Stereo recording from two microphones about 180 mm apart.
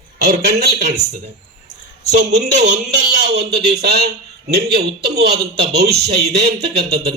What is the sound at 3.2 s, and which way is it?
A man's voice, 65° right (ahead or behind).